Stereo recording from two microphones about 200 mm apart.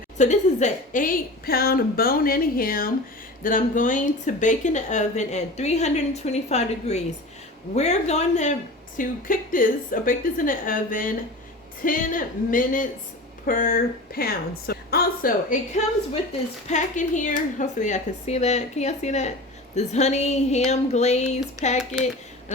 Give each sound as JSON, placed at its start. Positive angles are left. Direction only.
{"t": 0.2, "sound": "a woman's voice", "side_deg": 35}
{"t": 21.6, "sound": "speech", "side_deg": -15}